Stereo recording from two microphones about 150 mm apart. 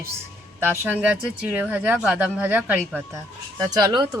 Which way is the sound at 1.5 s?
10° right (ahead or behind).